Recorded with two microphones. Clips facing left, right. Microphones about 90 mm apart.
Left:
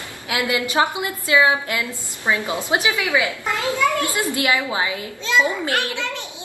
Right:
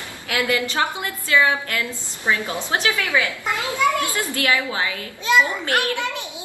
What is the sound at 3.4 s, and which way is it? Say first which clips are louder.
Speech: left 1 dB; 20° right (ahead or behind).